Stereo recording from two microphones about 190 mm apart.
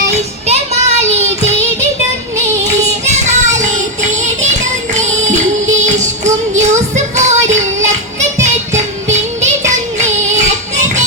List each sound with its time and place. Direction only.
0.4 s child singing: 35° right (ahead or behind)
3.2 s music: 40° right (ahead or behind)